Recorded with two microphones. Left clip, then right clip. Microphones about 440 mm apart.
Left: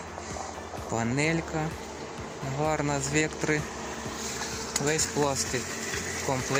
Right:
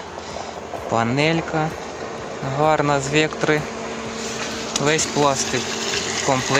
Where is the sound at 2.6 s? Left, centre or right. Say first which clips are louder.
Right 11 dB; right.